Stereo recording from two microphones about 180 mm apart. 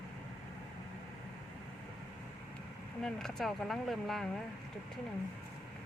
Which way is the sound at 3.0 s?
5° left (ahead or behind).